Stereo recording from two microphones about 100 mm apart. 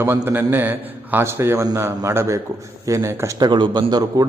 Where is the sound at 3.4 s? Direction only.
50° right (ahead or behind).